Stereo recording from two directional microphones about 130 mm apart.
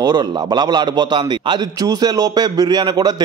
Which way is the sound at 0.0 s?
30° right (ahead or behind).